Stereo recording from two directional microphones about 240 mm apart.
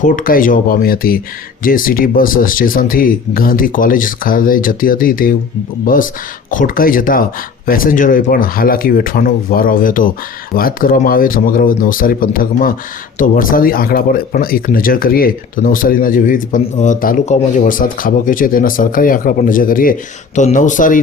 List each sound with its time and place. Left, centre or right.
0.0 s speech: left